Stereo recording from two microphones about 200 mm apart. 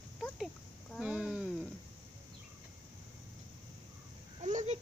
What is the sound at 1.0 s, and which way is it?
Dog, 5° right (ahead or behind).